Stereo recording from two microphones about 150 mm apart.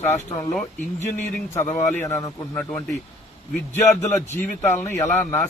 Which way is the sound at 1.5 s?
15° left (ahead or behind).